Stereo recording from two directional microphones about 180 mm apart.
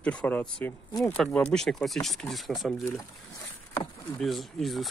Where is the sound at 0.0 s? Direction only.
5° left (ahead or behind).